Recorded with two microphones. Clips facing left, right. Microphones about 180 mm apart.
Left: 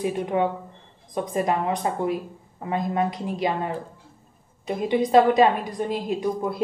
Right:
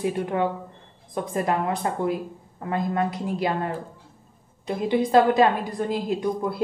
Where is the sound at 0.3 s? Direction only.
20° left (ahead or behind).